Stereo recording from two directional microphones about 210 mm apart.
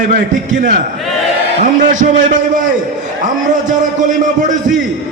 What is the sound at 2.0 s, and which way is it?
Speech, 35° right (ahead or behind).